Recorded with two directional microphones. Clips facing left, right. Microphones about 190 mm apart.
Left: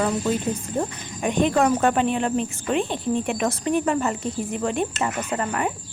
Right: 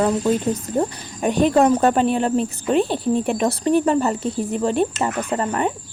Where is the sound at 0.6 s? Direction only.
40° right (ahead or behind).